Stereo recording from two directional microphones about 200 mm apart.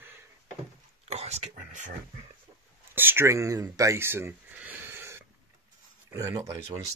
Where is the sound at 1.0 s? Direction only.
35° right (ahead or behind).